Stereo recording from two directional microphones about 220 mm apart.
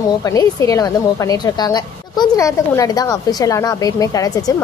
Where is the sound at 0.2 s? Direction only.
15° left (ahead or behind).